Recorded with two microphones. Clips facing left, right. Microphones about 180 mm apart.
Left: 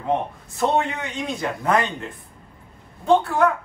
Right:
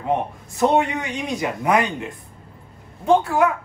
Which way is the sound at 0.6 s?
15° right (ahead or behind).